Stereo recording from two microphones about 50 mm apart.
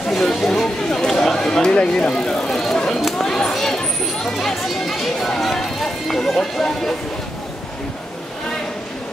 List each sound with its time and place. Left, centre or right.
0.1 s speech: centre
3.2 s a sound: centre
4.3 s speech: centre